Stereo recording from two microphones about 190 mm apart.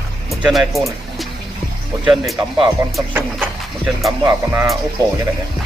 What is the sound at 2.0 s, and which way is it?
Speech, centre (ahead or behind).